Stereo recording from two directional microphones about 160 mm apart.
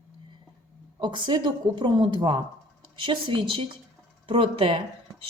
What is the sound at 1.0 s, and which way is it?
Speech, 30° right (ahead or behind).